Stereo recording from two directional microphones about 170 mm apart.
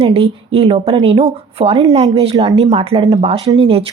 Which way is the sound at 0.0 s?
35° right (ahead or behind).